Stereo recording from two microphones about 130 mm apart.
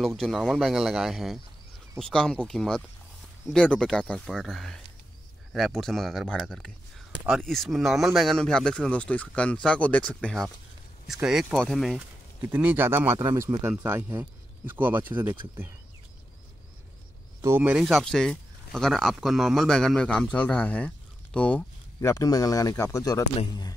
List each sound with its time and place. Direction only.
0.0 s speech: centre (ahead or behind)
12.4 s speech: 10° right (ahead or behind)
13.2 s speech: 30° right (ahead or behind)
17.4 s speech: 15° right (ahead or behind); by 21.6 s 10° left (ahead or behind)
22.0 s a man's voice: 25° left (ahead or behind)